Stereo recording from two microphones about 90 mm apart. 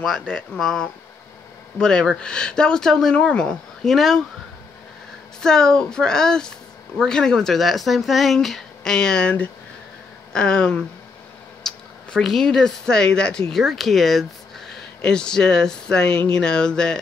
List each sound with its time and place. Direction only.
0.0 s speech: 5° left (ahead or behind)
5.4 s speech: 5° left (ahead or behind)